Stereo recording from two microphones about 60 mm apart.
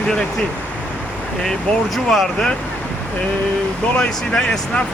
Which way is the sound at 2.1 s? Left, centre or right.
Centre.